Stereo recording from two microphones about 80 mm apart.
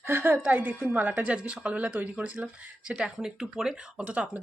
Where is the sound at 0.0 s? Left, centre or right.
Right.